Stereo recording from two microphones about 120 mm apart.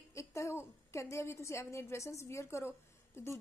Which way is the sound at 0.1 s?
25° left (ahead or behind).